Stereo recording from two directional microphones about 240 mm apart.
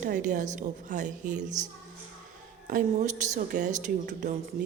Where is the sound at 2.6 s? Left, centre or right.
Right.